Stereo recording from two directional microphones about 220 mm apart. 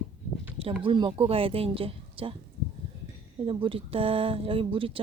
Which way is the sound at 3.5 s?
25° right (ahead or behind).